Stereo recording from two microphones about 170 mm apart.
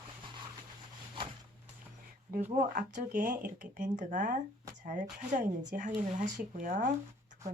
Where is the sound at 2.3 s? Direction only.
60° right (ahead or behind).